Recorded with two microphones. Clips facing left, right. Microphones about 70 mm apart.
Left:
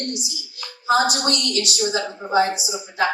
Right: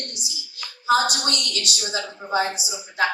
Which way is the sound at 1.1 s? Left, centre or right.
Left.